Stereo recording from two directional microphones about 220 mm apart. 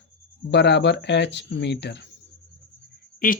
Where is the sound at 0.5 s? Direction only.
50° left (ahead or behind).